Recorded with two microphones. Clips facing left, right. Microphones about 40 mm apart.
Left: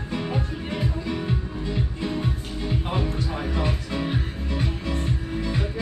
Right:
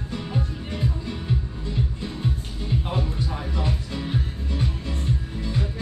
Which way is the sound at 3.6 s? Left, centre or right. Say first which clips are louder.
Left 2 dB; left.